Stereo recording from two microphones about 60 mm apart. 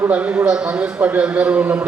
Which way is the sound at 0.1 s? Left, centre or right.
Right.